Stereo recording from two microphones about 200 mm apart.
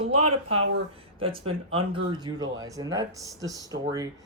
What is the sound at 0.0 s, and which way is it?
Speech, 30° right (ahead or behind).